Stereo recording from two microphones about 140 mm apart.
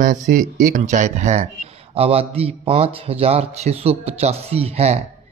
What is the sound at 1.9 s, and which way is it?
A man's voice, 45° right (ahead or behind).